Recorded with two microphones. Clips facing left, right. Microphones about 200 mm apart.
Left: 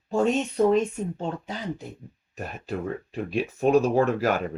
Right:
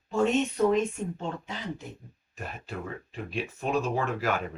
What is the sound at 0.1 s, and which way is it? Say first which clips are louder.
Speech: left 2 dB; 35° left (ahead or behind).